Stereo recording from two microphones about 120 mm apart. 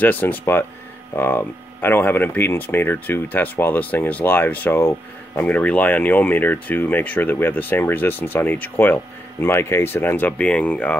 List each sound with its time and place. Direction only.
0.0 s speech: 15° left (ahead or behind)